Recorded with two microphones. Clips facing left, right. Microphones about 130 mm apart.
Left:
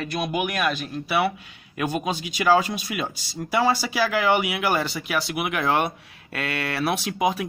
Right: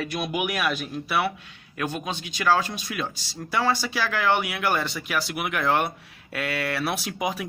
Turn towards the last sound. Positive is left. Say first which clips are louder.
# left 5 dB
turn(degrees=0)  # may be behind; listen again after turning